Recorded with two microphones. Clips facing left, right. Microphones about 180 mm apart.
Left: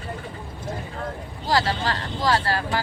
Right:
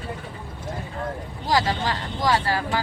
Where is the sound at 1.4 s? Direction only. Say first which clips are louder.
Even; 15° right (ahead or behind).